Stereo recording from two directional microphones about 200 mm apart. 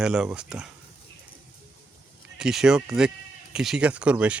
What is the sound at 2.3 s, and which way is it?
Speech, 5° right (ahead or behind).